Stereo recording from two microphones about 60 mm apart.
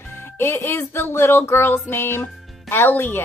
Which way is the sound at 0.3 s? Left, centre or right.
Left.